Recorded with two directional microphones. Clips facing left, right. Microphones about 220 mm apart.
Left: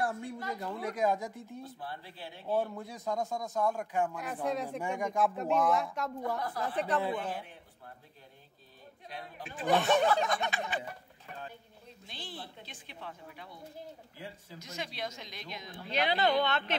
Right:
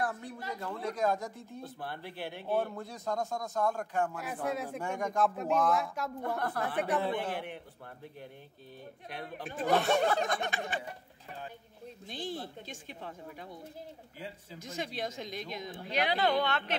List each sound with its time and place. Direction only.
0.0 s a sound: 25° left (ahead or behind)
0.7 s speech: 15° left (ahead or behind)
1.8 s speech: 65° right (ahead or behind)
2.7 s speech: 5° left (ahead or behind)
4.1 s speech: 5° right (ahead or behind)
6.2 s speech: 60° right (ahead or behind)
7.2 s a man's voice: 70° right (ahead or behind)
9.1 s speech: 55° right (ahead or behind)
12.1 s speech: 45° right (ahead or behind)
14.6 s speech: 50° right (ahead or behind)
15.8 s speech: 15° right (ahead or behind)